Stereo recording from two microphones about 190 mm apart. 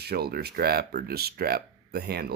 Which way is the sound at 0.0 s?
55° right (ahead or behind).